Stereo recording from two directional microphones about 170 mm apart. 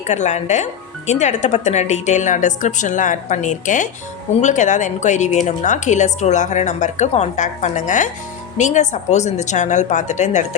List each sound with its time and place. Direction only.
0.1 s speech: 45° left (ahead or behind)